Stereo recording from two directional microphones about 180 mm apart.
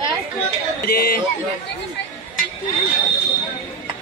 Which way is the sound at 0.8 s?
55° left (ahead or behind).